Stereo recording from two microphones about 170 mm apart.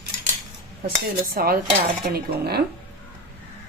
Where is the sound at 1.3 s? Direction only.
60° right (ahead or behind).